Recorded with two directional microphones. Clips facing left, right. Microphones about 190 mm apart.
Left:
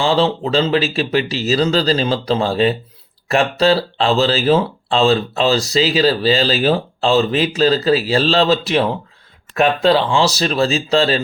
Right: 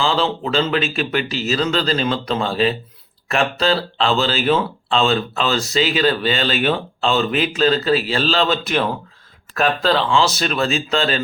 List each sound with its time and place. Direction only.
0.0 s speech: 30° left (ahead or behind)
9.9 s speech: 35° left (ahead or behind)